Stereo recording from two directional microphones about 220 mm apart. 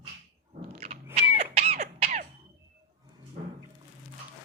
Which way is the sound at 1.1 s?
30° right (ahead or behind).